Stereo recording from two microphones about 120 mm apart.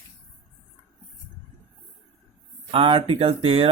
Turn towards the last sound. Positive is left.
turn(degrees=-55)  # may be behind; listen again after turning